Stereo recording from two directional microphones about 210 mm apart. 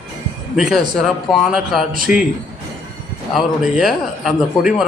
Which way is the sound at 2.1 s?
40° left (ahead or behind).